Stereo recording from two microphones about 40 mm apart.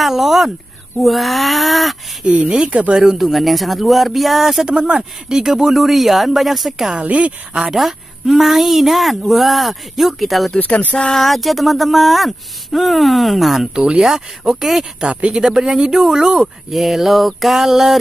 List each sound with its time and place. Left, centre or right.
0.0 s speech: centre
2.4 s speech: centre
3.2 s speech: centre
4.6 s speech: right; by 6.9 s centre
7.0 s speech: right
7.7 s speech: centre
10.6 s speech: left
11.1 s speech: centre
13.7 s speech: right
14.0 s speech: centre